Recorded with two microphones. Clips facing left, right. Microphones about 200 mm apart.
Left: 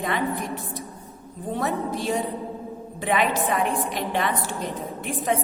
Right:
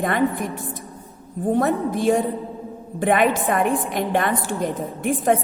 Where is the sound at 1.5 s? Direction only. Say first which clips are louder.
Right 6 dB; 50° right (ahead or behind).